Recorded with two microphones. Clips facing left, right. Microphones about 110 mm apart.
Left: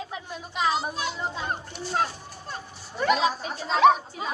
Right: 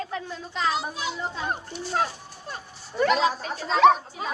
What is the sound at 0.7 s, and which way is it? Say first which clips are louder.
A child's voice: left 1 dB; centre (ahead or behind).